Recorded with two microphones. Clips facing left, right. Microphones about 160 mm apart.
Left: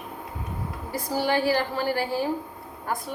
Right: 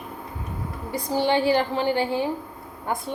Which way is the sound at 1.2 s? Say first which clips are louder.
Right 3 dB; 25° right (ahead or behind).